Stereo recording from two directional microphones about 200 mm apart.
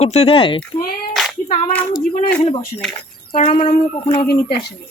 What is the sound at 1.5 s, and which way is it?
Child singing, 30° left (ahead or behind).